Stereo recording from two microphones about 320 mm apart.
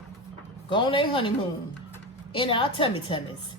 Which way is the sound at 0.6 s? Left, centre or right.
Centre.